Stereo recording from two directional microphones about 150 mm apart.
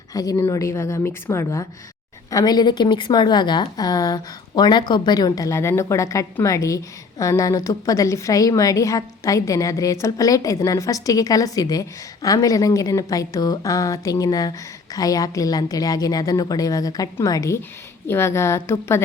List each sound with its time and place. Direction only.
0.1 s a woman's voice: 25° left (ahead or behind)